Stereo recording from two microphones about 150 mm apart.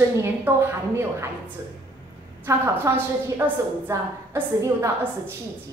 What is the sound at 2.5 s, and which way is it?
A woman's voice, 15° right (ahead or behind).